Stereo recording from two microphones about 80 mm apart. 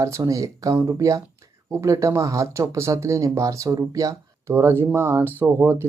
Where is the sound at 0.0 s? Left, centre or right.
Right.